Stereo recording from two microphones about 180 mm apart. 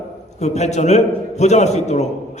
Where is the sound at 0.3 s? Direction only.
40° left (ahead or behind).